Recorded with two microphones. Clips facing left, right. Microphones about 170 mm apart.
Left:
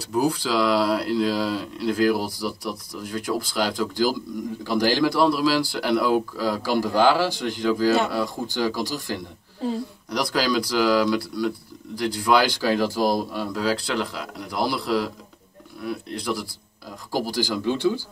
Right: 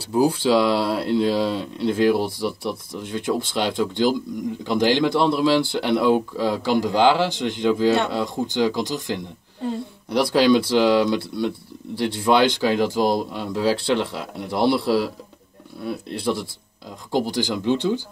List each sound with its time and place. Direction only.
0.0 s speech: 30° right (ahead or behind)